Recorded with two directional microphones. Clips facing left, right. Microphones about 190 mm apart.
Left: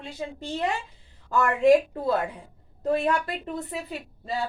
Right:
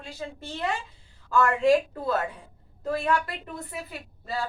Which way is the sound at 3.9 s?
25° left (ahead or behind).